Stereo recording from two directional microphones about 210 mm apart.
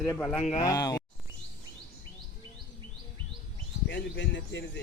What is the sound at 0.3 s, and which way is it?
Speech, 30° left (ahead or behind).